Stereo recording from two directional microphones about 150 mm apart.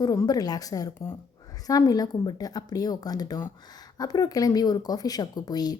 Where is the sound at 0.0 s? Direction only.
25° left (ahead or behind).